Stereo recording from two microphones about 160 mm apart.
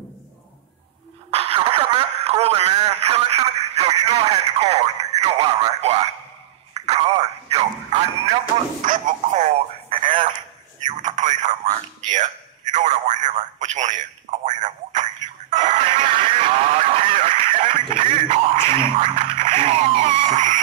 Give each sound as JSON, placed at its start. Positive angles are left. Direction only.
{"t": 1.3, "sound": "radio", "side_deg": -40}
{"t": 6.7, "sound": "telephone", "side_deg": -40}
{"t": 8.8, "sound": "telephone", "side_deg": -50}
{"t": 10.9, "sound": "telephone", "side_deg": -50}
{"t": 15.5, "sound": "music", "side_deg": -50}
{"t": 17.9, "sound": "a sound", "side_deg": -45}